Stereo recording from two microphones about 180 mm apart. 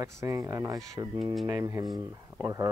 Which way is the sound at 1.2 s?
Centre (ahead or behind).